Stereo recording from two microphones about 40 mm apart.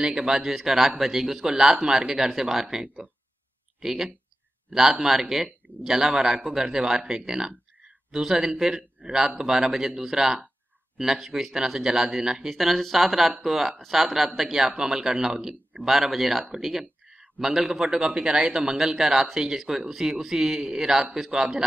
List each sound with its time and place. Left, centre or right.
0.0 s a man's voice: centre
12.4 s speech: centre